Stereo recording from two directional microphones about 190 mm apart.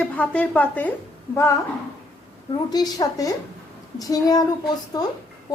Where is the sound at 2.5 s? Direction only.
20° left (ahead or behind).